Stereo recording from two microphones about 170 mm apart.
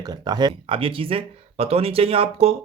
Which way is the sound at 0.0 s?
25° right (ahead or behind).